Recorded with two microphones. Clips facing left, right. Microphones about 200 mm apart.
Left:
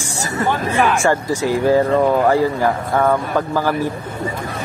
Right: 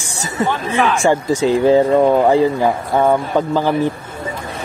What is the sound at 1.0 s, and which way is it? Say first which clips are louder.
Speech: right 3 dB; 20° right (ahead or behind).